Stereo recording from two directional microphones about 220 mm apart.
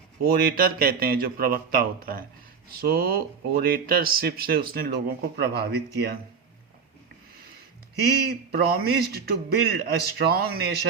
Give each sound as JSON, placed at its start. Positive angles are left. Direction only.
{"t": 0.2, "sound": "speech", "side_deg": -45}
{"t": 8.2, "sound": "speech", "side_deg": -45}